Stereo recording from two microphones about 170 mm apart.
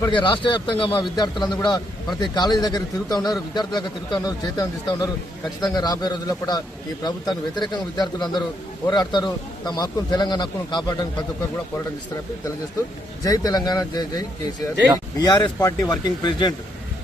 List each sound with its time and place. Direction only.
0.0 s a man's voice: 30° left (ahead or behind)
13.2 s a man's voice: 20° left (ahead or behind)
15.2 s a man's voice: 25° left (ahead or behind)